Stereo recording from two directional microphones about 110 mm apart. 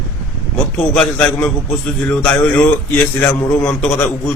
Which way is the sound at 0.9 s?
15° left (ahead or behind).